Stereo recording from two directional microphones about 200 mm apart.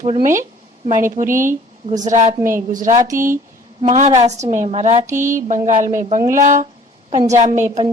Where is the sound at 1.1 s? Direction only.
40° right (ahead or behind).